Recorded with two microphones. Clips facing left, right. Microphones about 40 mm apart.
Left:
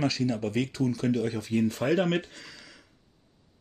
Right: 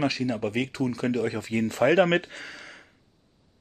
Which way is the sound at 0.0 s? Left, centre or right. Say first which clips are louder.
Right 1 dB; right.